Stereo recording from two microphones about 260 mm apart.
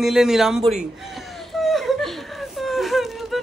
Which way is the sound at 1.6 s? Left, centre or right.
Centre.